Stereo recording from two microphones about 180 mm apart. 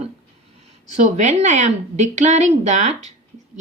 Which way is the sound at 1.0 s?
40° right (ahead or behind).